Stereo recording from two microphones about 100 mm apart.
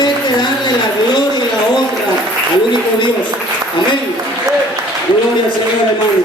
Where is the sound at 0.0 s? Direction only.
50° left (ahead or behind).